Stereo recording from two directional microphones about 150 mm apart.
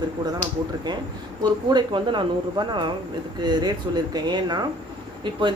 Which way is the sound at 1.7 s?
30° right (ahead or behind).